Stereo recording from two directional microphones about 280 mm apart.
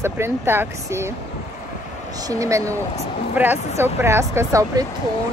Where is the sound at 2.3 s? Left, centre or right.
Centre.